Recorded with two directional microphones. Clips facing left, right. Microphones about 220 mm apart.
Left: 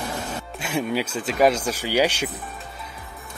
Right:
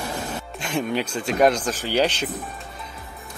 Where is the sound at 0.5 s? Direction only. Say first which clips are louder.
Even; 5° left (ahead or behind).